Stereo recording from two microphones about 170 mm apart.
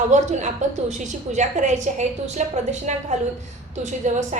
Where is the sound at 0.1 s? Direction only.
45° right (ahead or behind).